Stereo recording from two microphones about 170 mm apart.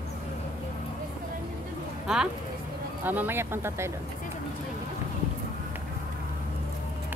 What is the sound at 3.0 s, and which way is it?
Speech, 10° right (ahead or behind).